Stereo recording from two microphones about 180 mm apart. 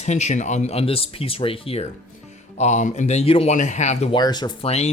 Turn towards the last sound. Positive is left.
turn(degrees=35)  # may be behind; listen again after turning